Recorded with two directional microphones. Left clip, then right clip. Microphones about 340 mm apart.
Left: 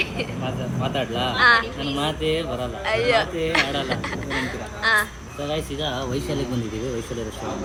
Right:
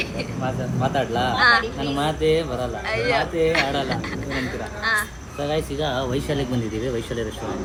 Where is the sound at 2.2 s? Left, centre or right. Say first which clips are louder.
Right 7 dB; right.